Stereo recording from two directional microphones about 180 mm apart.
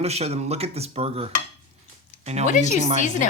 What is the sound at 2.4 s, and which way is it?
Speech, 45° left (ahead or behind).